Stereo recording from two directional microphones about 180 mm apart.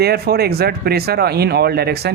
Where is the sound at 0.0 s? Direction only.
60° right (ahead or behind).